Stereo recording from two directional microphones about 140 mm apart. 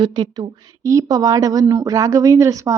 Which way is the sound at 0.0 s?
30° right (ahead or behind).